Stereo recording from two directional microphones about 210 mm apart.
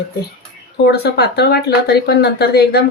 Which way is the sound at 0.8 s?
50° left (ahead or behind).